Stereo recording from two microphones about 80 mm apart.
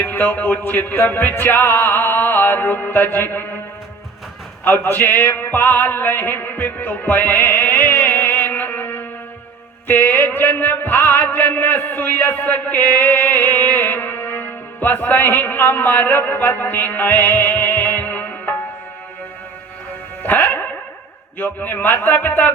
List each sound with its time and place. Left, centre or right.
0.0 s music: left
4.6 s music: left
20.2 s music: left